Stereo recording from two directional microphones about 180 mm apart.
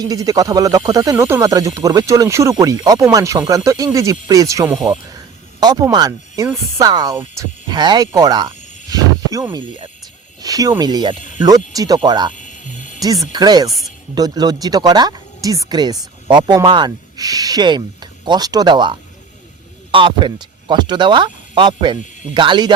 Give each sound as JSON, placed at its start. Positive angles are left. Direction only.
{"t": 0.0, "sound": "speech", "side_deg": -20}
{"t": 5.0, "sound": "a sound", "side_deg": -20}
{"t": 6.7, "sound": "speech", "side_deg": -20}
{"t": 12.3, "sound": "music", "side_deg": 45}
{"t": 13.3, "sound": "speech", "side_deg": -20}